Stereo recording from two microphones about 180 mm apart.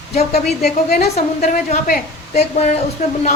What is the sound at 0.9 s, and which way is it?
A woman's voice, 40° left (ahead or behind).